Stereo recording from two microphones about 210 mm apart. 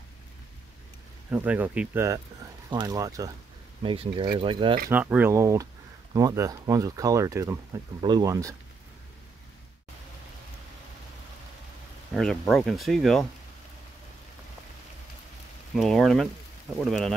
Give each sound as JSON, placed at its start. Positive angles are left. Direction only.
{"t": 1.3, "sound": "speech", "side_deg": -5}
{"t": 4.8, "sound": "speech", "side_deg": -5}
{"t": 12.1, "sound": "speech", "side_deg": 0}
{"t": 15.7, "sound": "speech", "side_deg": 0}